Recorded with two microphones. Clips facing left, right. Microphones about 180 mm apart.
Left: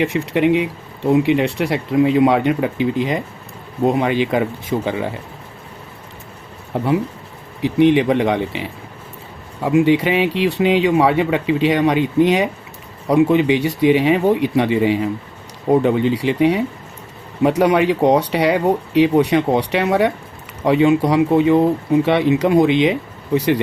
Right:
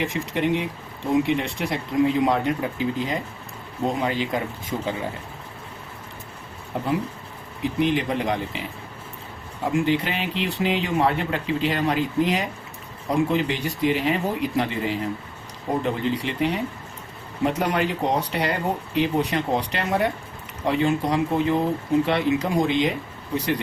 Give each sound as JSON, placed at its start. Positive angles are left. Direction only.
{"t": 0.0, "sound": "speech", "side_deg": 65}
{"t": 7.6, "sound": "speech", "side_deg": 70}
{"t": 9.6, "sound": "speech", "side_deg": 75}